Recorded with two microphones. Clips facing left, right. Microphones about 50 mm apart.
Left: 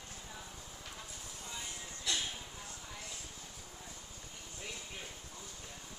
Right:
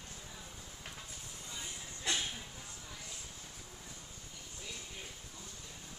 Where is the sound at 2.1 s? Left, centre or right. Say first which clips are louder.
Right 1 dB; right.